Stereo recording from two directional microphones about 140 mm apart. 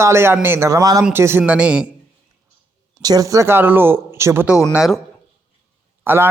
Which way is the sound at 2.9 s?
25° right (ahead or behind).